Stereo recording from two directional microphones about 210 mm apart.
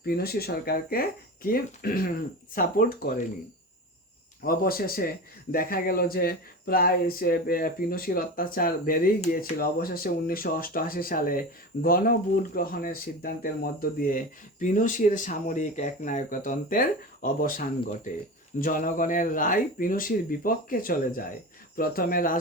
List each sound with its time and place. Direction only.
0.0 s a man's voice: 45° left (ahead or behind)
4.4 s a man's voice: 45° left (ahead or behind)